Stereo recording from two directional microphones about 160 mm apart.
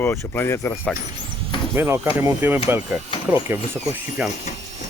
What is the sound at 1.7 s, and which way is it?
Speech, 15° right (ahead or behind).